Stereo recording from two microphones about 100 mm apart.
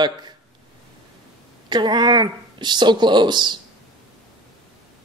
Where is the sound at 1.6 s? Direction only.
45° right (ahead or behind).